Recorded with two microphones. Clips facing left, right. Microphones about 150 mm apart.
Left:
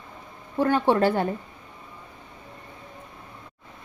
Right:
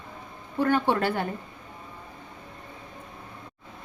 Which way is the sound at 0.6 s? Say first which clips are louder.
Left 3 dB; 30° left (ahead or behind).